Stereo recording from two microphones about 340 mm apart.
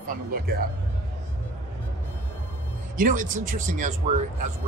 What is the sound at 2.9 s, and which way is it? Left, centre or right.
Speech, right.